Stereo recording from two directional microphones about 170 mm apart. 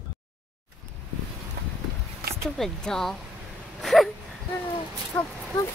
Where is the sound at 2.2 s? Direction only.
65° right (ahead or behind).